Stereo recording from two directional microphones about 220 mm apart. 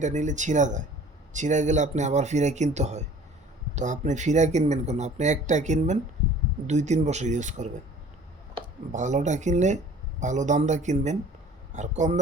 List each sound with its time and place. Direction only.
0.0 s speech: 35° right (ahead or behind)